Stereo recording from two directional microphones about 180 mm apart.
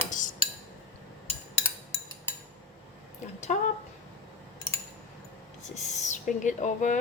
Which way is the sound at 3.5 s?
40° left (ahead or behind).